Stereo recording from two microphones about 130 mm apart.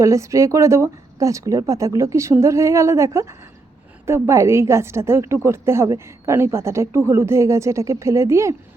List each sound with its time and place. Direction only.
0.0 s a woman's voice: 25° right (ahead or behind)